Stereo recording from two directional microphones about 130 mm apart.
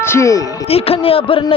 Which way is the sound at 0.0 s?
20° left (ahead or behind).